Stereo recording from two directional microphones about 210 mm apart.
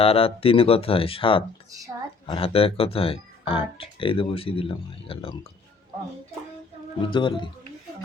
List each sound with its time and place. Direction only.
0.0 s speech: 25° left (ahead or behind)
7.1 s speech: 25° left (ahead or behind)